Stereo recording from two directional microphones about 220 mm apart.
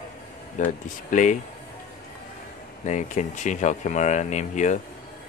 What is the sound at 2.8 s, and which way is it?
Speech, 35° left (ahead or behind).